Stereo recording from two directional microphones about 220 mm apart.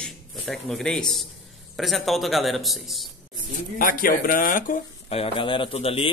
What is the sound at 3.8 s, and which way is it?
Speech, 40° left (ahead or behind).